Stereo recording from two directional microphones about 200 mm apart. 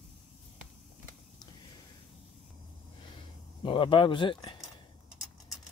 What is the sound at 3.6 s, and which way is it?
Speech, 25° left (ahead or behind).